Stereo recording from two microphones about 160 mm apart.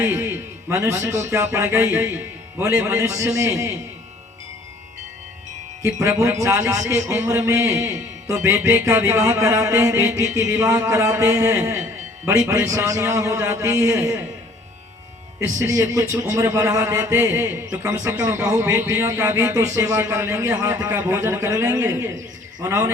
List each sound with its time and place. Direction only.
0.0 s a man's voice: 10° right (ahead or behind)
6.0 s a man's voice: 15° right (ahead or behind)
15.4 s a man's voice: 15° right (ahead or behind)